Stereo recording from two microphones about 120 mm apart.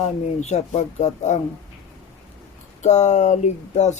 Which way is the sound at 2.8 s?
75° left (ahead or behind).